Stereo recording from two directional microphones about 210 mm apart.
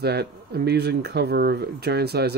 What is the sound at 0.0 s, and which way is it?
Mantra, 50° right (ahead or behind).